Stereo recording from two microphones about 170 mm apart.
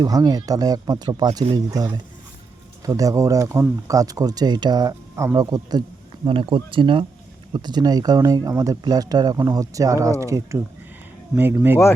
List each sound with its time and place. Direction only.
0.0 s speech: 20° right (ahead or behind)